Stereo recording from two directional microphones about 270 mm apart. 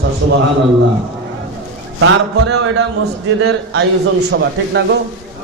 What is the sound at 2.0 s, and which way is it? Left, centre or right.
Speech, right.